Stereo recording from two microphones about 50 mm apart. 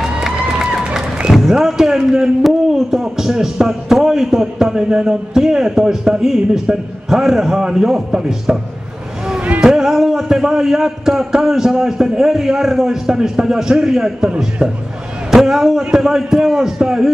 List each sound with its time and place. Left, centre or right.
1.5 s a man's voice: centre
9.6 s a man's voice: centre
15.3 s a man's voice: centre